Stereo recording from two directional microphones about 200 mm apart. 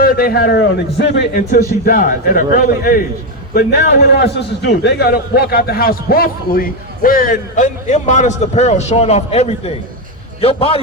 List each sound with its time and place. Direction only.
0.0 s a man's voice: 50° left (ahead or behind)
1.3 s a man's voice: 45° left (ahead or behind); by 10.8 s 30° left (ahead or behind)